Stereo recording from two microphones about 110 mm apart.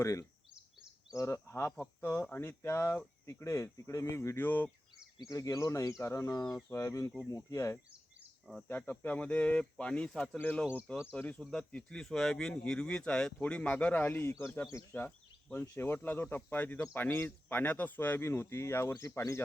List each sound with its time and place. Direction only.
0.0 s speech: 30° left (ahead or behind)
5.1 s speech: 35° left (ahead or behind)
6.4 s speech: 5° left (ahead or behind)
6.7 s speech: 30° left (ahead or behind)
8.6 s speech: 15° left (ahead or behind)